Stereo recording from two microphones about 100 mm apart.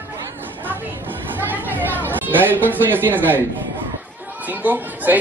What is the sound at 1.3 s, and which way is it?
Chatter, 20° right (ahead or behind).